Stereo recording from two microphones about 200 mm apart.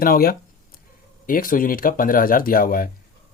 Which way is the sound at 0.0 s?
45° left (ahead or behind).